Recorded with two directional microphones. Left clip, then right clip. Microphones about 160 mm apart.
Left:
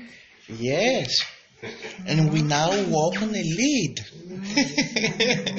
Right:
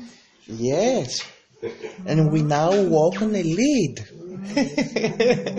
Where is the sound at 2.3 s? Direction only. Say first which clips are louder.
Right 3 dB; 40° right (ahead or behind).